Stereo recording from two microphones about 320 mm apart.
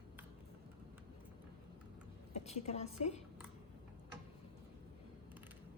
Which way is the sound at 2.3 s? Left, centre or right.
Centre.